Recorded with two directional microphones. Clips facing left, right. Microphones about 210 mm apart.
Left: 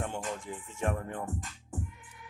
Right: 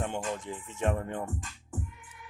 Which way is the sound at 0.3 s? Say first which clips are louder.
Right 2 dB; 20° right (ahead or behind).